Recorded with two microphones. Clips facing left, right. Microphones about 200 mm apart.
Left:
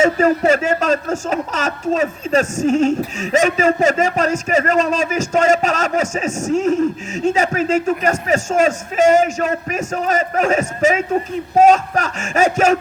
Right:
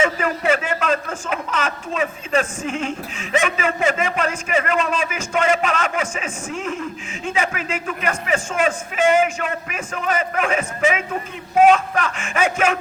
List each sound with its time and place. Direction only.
0.0 s speech: 40° left (ahead or behind)